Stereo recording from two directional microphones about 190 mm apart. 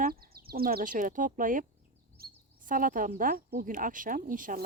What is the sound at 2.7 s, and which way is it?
Speech, 45° right (ahead or behind).